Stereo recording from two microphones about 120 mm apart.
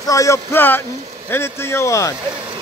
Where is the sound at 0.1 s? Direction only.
25° left (ahead or behind).